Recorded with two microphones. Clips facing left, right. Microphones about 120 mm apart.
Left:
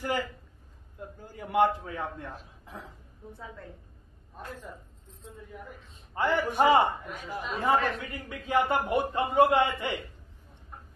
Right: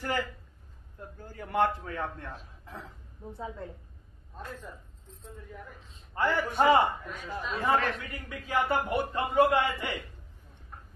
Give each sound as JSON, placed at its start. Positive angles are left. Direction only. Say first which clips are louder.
{"t": 0.0, "sound": "a man's voice", "louder": "left 1 dB", "side_deg": 15}
{"t": 6.1, "sound": "a man's voice", "louder": "left 1 dB", "side_deg": 15}